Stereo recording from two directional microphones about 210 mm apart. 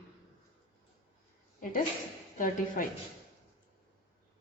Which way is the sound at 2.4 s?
40° left (ahead or behind).